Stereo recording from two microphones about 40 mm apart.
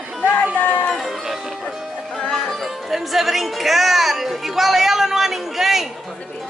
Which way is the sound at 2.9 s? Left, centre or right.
Centre.